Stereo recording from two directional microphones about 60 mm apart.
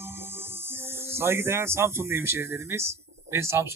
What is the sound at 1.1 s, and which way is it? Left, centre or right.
Speech, right.